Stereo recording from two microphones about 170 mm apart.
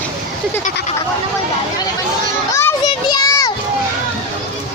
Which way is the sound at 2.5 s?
20° left (ahead or behind).